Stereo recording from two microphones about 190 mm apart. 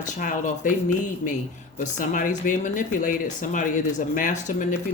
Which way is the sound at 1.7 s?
45° left (ahead or behind).